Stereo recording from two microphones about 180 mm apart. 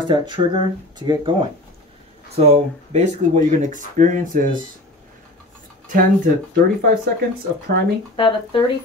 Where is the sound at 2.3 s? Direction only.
35° right (ahead or behind).